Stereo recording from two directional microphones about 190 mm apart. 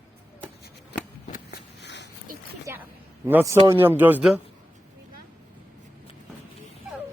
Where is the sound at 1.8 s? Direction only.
65° left (ahead or behind).